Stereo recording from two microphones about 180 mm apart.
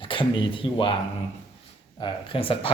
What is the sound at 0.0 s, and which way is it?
Speech, 30° left (ahead or behind).